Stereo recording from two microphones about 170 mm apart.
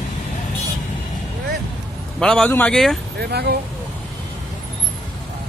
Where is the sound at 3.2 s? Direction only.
75° right (ahead or behind).